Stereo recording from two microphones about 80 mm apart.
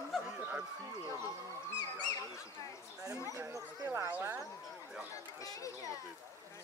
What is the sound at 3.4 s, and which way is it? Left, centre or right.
Speech, right.